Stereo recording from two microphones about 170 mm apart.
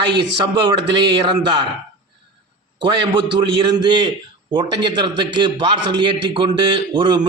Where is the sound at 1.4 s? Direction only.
25° right (ahead or behind).